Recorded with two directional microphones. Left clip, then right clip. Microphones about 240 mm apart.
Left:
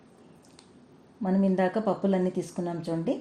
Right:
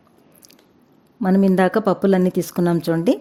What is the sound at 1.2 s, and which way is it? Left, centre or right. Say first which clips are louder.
Speech: right 9 dB; right.